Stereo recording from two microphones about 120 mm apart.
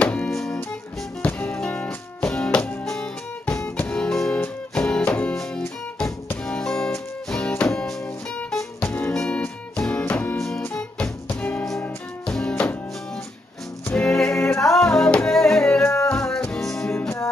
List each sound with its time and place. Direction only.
0.0 s music: 10° left (ahead or behind)
13.8 s music: 10° left (ahead or behind)
14.3 s music: 25° left (ahead or behind)
14.7 s music: 5° left (ahead or behind)